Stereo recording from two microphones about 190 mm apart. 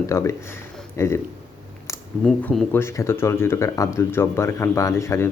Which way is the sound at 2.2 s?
5° left (ahead or behind).